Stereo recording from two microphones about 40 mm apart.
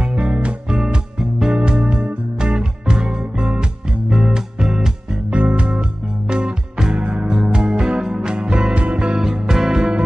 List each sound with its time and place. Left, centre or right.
0.1 s music: right
0.7 s music: centre
1.5 s music: right
5.3 s music: right